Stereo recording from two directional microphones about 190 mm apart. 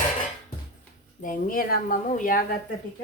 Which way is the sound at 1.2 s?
45° left (ahead or behind).